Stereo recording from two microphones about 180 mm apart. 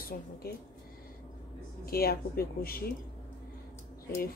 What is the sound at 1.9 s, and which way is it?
Speech, 55° left (ahead or behind).